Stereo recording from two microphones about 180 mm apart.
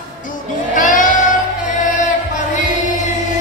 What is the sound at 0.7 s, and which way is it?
Child singing, 45° left (ahead or behind).